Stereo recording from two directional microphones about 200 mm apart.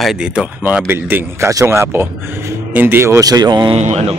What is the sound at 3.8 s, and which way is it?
Speech, 35° right (ahead or behind).